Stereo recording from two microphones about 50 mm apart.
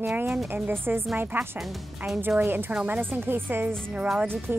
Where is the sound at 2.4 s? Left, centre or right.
Right.